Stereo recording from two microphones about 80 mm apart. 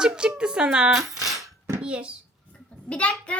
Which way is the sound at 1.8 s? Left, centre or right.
Centre.